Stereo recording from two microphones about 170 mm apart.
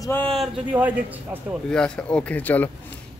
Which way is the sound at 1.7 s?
5° left (ahead or behind).